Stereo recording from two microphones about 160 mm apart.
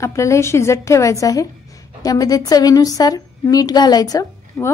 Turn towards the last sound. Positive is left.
turn(degrees=25)  # may be behind; listen again after turning